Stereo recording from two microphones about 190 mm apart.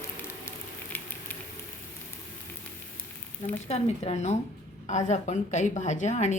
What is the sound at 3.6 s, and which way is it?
A woman's voice, 35° left (ahead or behind).